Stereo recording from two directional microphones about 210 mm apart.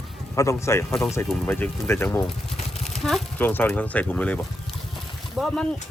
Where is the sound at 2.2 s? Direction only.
30° left (ahead or behind).